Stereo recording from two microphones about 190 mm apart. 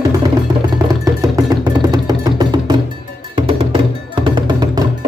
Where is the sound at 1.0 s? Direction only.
20° right (ahead or behind).